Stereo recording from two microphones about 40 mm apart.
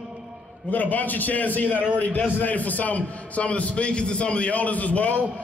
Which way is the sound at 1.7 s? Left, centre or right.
Right.